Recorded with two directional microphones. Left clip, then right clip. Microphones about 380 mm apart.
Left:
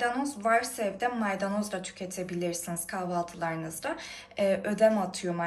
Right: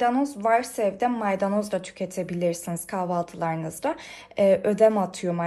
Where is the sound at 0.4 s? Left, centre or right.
Centre.